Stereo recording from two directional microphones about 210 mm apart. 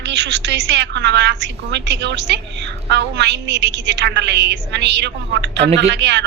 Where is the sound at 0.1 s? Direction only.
60° right (ahead or behind).